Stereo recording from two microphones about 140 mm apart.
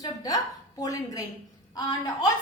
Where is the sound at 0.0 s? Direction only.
25° left (ahead or behind).